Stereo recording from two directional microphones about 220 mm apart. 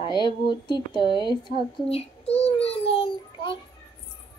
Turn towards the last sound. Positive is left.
turn(degrees=25)  # may be behind; listen again after turning